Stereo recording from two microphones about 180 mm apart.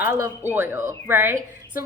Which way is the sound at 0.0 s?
15° right (ahead or behind).